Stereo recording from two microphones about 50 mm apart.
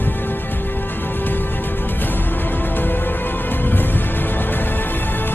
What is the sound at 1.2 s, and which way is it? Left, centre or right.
Music, left.